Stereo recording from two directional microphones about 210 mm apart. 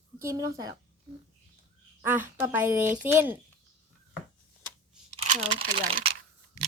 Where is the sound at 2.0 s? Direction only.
10° right (ahead or behind).